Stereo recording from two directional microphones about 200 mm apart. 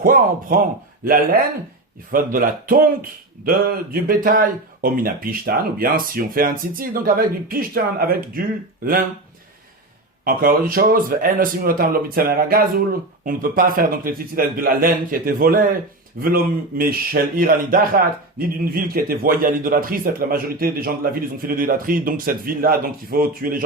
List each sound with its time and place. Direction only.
0.0 s speech: 45° right (ahead or behind)
10.2 s speech: 45° right (ahead or behind)